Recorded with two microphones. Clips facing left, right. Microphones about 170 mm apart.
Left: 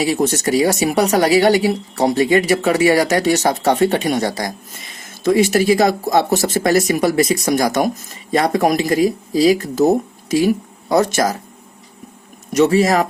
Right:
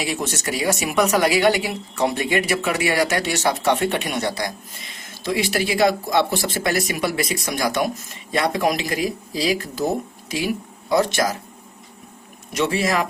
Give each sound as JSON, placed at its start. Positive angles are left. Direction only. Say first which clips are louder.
{"t": 0.0, "sound": "speech", "louder": "left 8 dB", "side_deg": 40}
{"t": 12.5, "sound": "speech", "louder": "left 8 dB", "side_deg": 40}